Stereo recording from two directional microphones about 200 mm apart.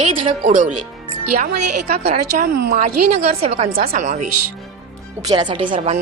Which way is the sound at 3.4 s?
30° right (ahead or behind).